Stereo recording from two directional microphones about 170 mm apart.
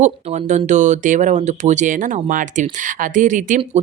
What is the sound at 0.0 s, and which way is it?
Speech, 40° right (ahead or behind).